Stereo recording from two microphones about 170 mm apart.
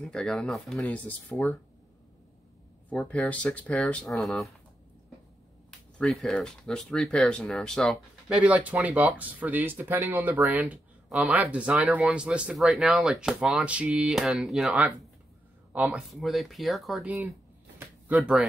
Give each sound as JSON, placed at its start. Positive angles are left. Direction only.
{"t": 0.0, "sound": "speech", "side_deg": 0}
{"t": 2.9, "sound": "speech", "side_deg": 5}
{"t": 5.7, "sound": "speech", "side_deg": 0}
{"t": 17.7, "sound": "a sound", "side_deg": -10}